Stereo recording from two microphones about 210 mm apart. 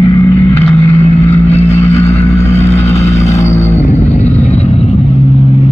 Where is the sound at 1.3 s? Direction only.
30° left (ahead or behind).